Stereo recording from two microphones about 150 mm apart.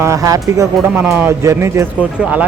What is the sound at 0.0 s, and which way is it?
Speech, 20° right (ahead or behind).